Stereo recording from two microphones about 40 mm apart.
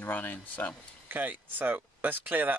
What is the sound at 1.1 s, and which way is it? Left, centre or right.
Speech, right.